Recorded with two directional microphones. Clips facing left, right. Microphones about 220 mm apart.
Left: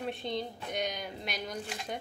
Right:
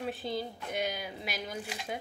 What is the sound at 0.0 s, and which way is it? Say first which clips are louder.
A woman's voice: even; 5° right (ahead or behind).